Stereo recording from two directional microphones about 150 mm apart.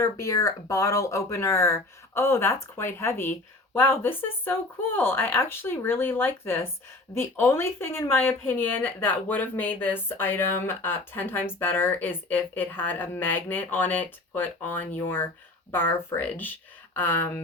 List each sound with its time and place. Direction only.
0.2 s speech: 20° left (ahead or behind)